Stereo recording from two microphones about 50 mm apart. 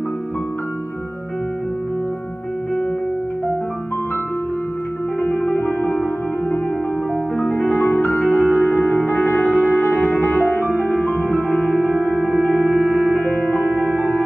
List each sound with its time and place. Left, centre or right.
5.2 s music: left
7.3 s music: left